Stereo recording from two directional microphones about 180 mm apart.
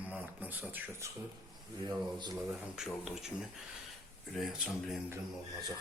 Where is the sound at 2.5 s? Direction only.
5° right (ahead or behind).